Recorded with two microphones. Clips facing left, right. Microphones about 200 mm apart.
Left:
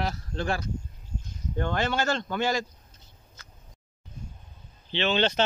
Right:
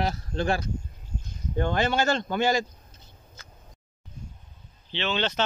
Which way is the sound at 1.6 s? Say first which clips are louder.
Right 3 dB; 15° right (ahead or behind).